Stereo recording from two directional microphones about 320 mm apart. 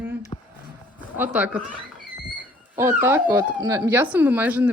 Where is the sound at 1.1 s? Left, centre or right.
Centre.